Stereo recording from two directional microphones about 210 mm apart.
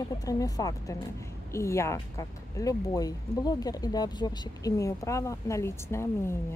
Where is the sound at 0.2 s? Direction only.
15° left (ahead or behind).